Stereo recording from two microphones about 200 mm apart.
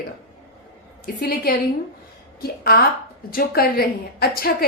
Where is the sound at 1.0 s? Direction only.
50° left (ahead or behind).